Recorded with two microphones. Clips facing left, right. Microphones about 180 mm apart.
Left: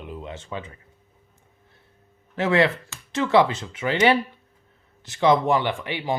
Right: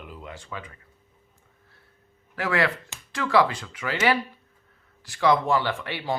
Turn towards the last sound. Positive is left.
turn(degrees=15)  # may be behind; listen again after turning